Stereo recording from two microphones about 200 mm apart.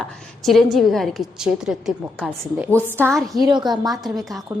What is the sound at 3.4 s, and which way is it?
Speech, 20° right (ahead or behind).